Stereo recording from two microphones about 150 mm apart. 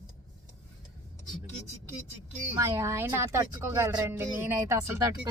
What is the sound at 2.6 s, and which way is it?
Speech, 20° right (ahead or behind).